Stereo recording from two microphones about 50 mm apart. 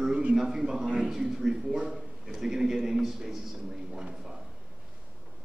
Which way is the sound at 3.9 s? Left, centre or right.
Centre.